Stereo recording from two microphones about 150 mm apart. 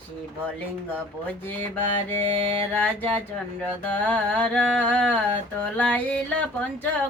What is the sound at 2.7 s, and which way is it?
Mantra, 10° left (ahead or behind).